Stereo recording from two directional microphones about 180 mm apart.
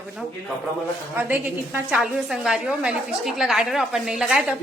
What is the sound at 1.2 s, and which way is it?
A woman's voice, 10° right (ahead or behind).